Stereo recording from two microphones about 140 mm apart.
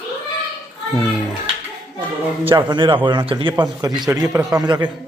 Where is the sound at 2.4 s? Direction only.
35° right (ahead or behind).